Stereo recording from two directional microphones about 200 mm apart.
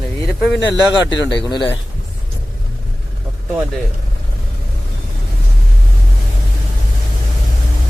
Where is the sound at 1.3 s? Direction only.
20° left (ahead or behind).